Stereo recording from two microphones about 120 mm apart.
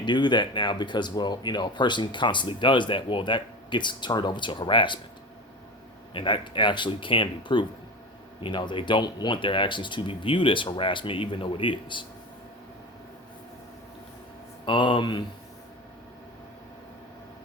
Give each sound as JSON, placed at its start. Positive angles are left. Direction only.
{"t": 0.0, "sound": "speech", "side_deg": 40}
{"t": 6.1, "sound": "speech", "side_deg": 45}
{"t": 14.6, "sound": "speech", "side_deg": 45}